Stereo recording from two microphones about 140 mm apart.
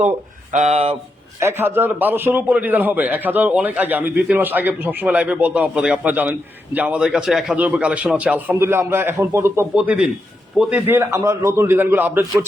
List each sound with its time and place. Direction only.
0.5 s speech: 55° right (ahead or behind)
1.4 s a man's voice: 15° right (ahead or behind)
9.7 s a man's voice: 5° right (ahead or behind)